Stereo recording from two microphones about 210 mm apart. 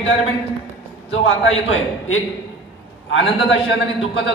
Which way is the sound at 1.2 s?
70° left (ahead or behind).